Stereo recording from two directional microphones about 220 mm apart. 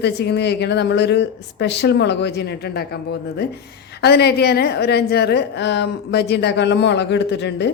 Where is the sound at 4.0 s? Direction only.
50° left (ahead or behind).